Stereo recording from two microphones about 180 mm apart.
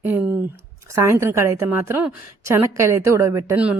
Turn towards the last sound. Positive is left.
turn(degrees=-15)  # may be behind; listen again after turning